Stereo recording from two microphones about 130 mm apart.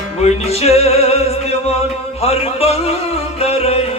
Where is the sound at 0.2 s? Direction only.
55° left (ahead or behind).